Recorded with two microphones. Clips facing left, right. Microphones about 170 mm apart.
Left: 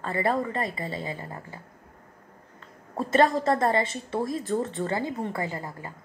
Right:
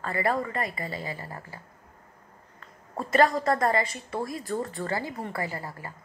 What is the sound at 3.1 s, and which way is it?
A woman's voice, 25° left (ahead or behind).